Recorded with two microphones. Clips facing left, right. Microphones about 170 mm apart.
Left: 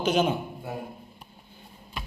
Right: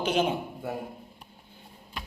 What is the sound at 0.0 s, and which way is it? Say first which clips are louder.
Speech: left 2 dB; 30° right (ahead or behind).